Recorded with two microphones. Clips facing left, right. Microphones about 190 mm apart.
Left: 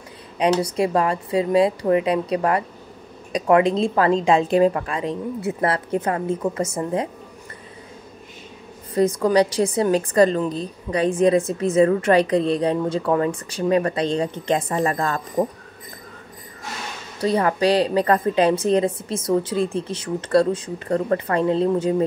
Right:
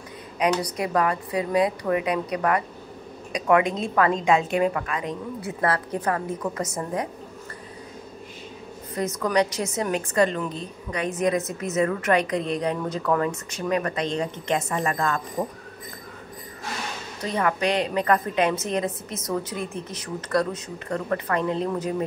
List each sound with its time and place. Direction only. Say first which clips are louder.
0.4 s a woman's voice: left 5 dB; 30° left (ahead or behind)
8.9 s a woman's voice: left 6 dB; 30° left (ahead or behind)
17.2 s a woman's voice: left 6 dB; 35° left (ahead or behind)